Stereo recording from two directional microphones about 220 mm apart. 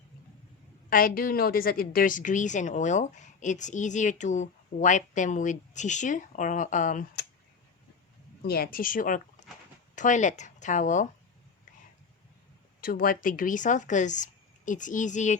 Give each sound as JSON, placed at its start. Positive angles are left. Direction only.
{"t": 0.9, "sound": "a woman's voice", "side_deg": 40}
{"t": 8.4, "sound": "a woman's voice", "side_deg": 45}
{"t": 12.8, "sound": "a woman's voice", "side_deg": 40}